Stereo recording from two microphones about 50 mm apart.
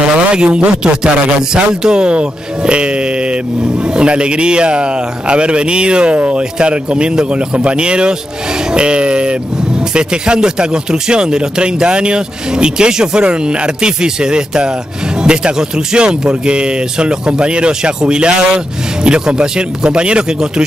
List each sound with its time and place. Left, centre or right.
0.0 s a man's voice: right
1.7 s a man's voice: centre